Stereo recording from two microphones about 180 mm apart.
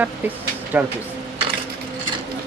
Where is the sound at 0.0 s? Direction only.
10° right (ahead or behind).